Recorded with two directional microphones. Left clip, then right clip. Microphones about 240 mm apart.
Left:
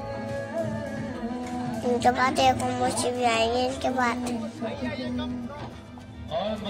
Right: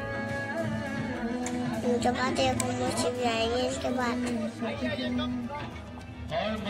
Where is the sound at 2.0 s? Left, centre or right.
Centre.